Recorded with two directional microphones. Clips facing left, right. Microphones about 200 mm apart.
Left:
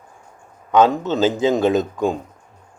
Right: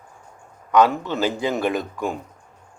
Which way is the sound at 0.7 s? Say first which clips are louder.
Left 2 dB; 25° left (ahead or behind).